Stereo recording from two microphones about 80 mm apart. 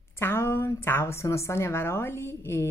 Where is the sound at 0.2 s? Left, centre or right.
Left.